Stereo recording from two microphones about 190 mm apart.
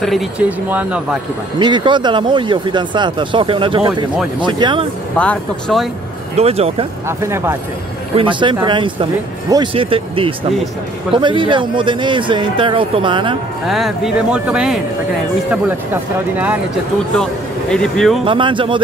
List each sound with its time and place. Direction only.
0.0 s speech: 5° right (ahead or behind)
1.6 s speech: 25° right (ahead or behind)
5.1 s speech: 10° left (ahead or behind)
6.3 s speech: 30° right (ahead or behind)
7.1 s speech: 15° right (ahead or behind)
8.2 s speech: 25° right (ahead or behind)
13.7 s speech: centre (ahead or behind)
17.2 s speech: 5° left (ahead or behind)
18.2 s speech: 25° right (ahead or behind)